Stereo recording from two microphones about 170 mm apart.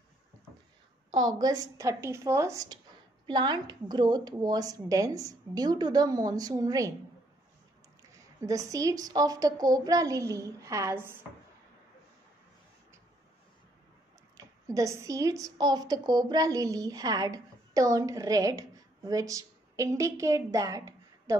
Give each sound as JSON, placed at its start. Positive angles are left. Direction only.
{"t": 1.1, "sound": "a woman's voice", "side_deg": -25}
{"t": 8.4, "sound": "a woman's voice", "side_deg": -20}
{"t": 14.3, "sound": "a woman's voice", "side_deg": -20}